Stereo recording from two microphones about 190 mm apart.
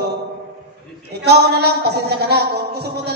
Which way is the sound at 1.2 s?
55° right (ahead or behind).